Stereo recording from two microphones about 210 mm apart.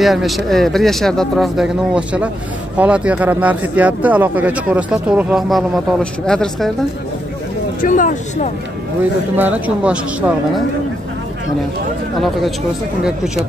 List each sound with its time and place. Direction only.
0.0 s speech: centre (ahead or behind)
7.8 s speech: 40° left (ahead or behind)
9.4 s speech: 5° right (ahead or behind)
12.2 s speech: centre (ahead or behind)